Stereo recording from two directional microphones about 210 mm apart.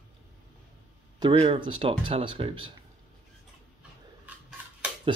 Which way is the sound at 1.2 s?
25° right (ahead or behind).